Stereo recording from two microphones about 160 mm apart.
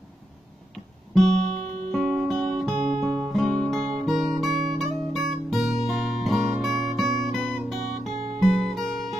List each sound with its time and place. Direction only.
1.1 s music: centre (ahead or behind)
1.6 s music: 40° right (ahead or behind)
1.9 s music: 5° left (ahead or behind)